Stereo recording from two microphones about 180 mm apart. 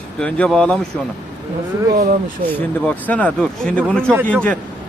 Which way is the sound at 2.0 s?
50° right (ahead or behind).